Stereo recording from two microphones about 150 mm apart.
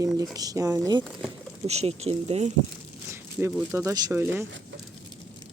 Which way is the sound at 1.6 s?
45° right (ahead or behind).